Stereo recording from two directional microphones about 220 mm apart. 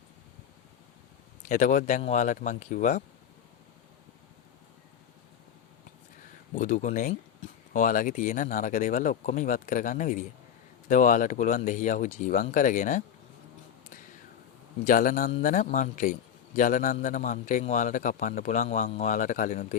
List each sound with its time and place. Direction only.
1.5 s a man's voice: 35° left (ahead or behind)
6.6 s a man's voice: 35° left (ahead or behind)
14.8 s a man's voice: 40° left (ahead or behind)